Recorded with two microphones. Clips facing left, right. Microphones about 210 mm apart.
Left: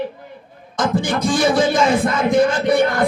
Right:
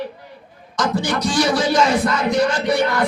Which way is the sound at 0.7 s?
55° left (ahead or behind).